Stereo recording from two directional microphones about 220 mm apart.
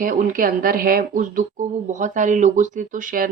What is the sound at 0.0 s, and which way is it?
Speech, 40° right (ahead or behind).